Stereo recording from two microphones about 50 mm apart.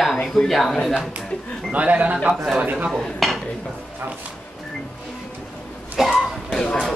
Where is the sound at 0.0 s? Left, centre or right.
Centre.